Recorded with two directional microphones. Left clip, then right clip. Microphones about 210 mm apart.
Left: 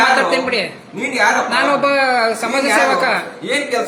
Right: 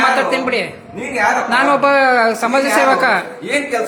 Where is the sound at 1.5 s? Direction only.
25° right (ahead or behind).